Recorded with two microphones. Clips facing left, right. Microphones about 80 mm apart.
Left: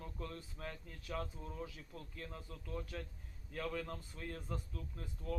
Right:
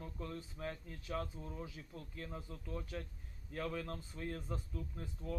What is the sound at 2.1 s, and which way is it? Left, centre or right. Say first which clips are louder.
A man's voice: right 3 dB; centre.